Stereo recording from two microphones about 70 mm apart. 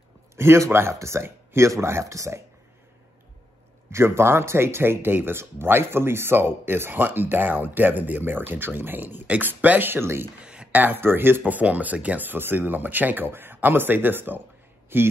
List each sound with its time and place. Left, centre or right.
0.4 s speech: right
3.9 s speech: right
10.4 s a sound: centre
10.8 s speech: right